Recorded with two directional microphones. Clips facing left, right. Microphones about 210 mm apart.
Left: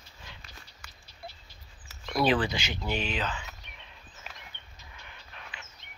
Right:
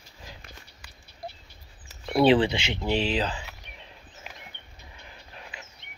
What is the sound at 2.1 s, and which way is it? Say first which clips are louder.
Speech: right 6 dB; 30° right (ahead or behind).